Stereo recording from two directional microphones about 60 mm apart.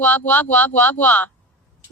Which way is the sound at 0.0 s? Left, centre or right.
Left.